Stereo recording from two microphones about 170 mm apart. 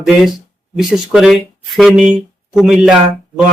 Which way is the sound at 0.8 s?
Centre (ahead or behind).